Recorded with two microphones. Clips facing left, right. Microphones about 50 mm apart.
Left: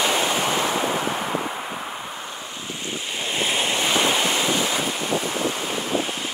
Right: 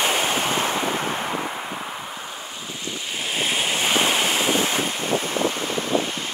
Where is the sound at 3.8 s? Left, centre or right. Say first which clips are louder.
Right 1 dB; right.